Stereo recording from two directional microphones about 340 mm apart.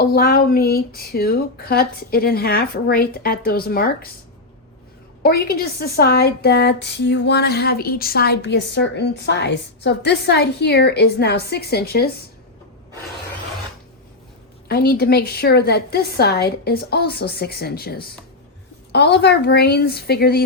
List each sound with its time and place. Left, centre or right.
0.0 s a woman's voice: left
5.2 s a woman's voice: left
14.7 s a woman's voice: left